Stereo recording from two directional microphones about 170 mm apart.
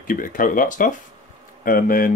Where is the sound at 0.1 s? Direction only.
50° left (ahead or behind).